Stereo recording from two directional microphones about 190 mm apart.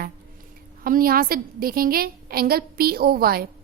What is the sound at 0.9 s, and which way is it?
A woman's voice, 50° right (ahead or behind).